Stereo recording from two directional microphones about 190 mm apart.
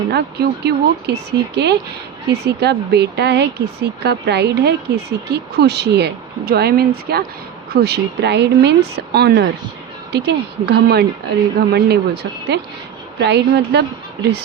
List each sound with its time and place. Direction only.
0.1 s speech: 60° right (ahead or behind)